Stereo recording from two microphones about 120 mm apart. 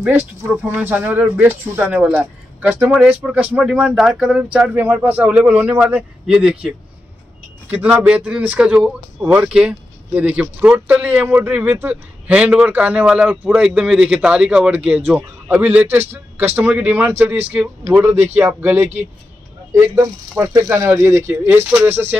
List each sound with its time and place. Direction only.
0.0 s speech: 15° right (ahead or behind)
7.7 s speech: 15° right (ahead or behind)